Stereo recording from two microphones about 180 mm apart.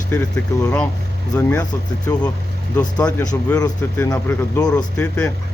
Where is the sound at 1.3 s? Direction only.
15° left (ahead or behind).